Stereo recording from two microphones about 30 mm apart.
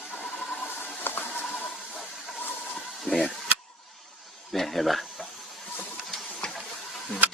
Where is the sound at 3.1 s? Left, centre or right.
Left.